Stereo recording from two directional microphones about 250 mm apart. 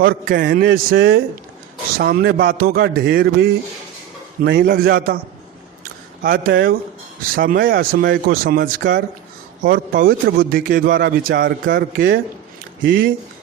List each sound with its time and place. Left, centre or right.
0.0 s a man's voice: right
5.8 s a sound: right
7.2 s a man's voice: right